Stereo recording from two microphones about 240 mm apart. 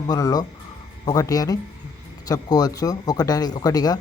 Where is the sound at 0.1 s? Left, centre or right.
Centre.